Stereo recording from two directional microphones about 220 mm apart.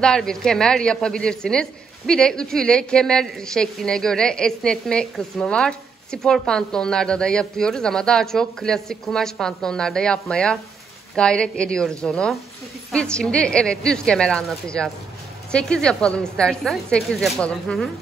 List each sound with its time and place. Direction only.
0.0 s a woman's voice: 5° left (ahead or behind)